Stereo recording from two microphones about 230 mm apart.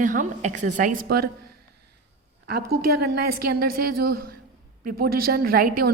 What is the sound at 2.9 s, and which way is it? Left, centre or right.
A woman's voice, right.